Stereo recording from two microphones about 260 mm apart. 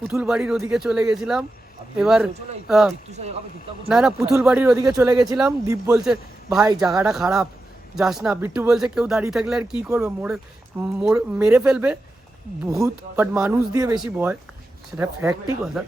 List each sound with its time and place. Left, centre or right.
0.0 s speech: centre
3.1 s speech: right
3.8 s a man's voice: centre